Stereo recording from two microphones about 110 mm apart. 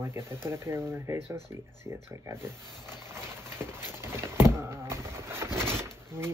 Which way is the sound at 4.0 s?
25° right (ahead or behind).